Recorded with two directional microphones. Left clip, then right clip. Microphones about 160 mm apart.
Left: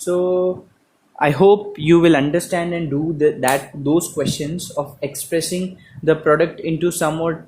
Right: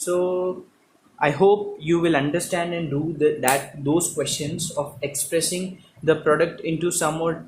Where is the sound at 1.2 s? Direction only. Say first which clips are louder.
Left 5 dB; 45° left (ahead or behind).